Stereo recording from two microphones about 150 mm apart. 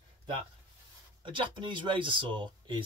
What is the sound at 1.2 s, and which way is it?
Speech, 35° right (ahead or behind).